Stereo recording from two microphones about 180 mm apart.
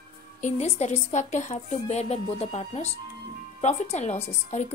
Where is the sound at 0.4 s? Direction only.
40° left (ahead or behind).